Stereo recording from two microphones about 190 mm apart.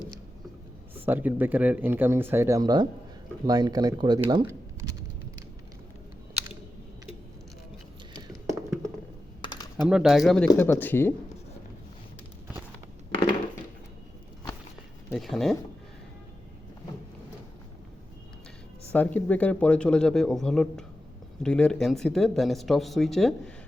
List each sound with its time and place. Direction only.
0.9 s speech: 10° right (ahead or behind)
8.4 s tap: 15° right (ahead or behind)
9.4 s typing: 20° left (ahead or behind)
9.8 s speech: centre (ahead or behind)
15.1 s speech: centre (ahead or behind)
18.9 s speech: 10° left (ahead or behind)